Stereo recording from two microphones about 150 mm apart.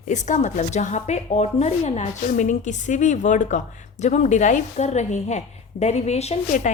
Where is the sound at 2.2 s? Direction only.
60° left (ahead or behind).